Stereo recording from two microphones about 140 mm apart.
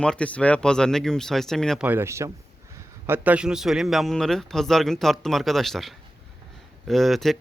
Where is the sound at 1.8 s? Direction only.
15° right (ahead or behind).